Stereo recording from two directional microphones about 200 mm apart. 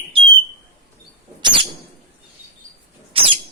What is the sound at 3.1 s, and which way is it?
Rodents, 25° right (ahead or behind).